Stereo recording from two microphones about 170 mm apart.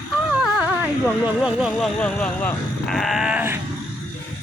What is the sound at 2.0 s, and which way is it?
Speech, 5° left (ahead or behind).